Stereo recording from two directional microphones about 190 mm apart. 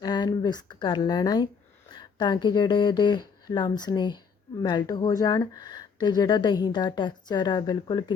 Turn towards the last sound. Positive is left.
turn(degrees=20)  # may be behind; listen again after turning